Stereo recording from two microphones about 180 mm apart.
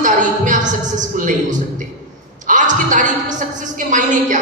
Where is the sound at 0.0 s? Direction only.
45° right (ahead or behind).